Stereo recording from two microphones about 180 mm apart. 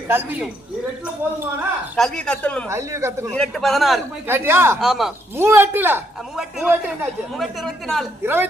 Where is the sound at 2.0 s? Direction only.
5° left (ahead or behind).